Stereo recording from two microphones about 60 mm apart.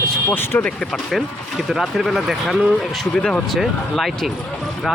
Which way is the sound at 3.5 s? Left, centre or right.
Centre.